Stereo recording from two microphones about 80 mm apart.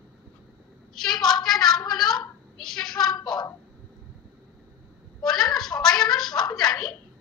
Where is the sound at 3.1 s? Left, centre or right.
Left.